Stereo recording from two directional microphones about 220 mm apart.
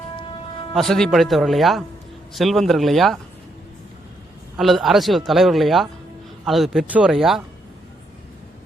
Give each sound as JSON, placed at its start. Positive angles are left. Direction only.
{"t": 0.7, "sound": "a man's voice", "side_deg": 0}
{"t": 4.5, "sound": "a man's voice", "side_deg": 0}